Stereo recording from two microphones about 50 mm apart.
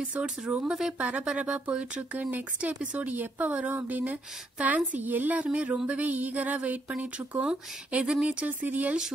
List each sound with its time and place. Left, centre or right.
0.0 s speech: right
0.7 s speech: centre
0.9 s speech: right
1.2 s speech: centre
2.1 s speech: right
8.5 s speech: right